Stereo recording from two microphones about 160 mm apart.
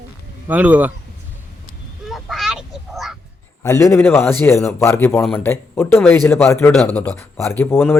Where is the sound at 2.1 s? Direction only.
Centre (ahead or behind).